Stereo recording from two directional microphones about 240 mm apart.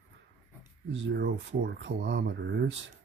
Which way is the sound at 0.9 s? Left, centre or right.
Right.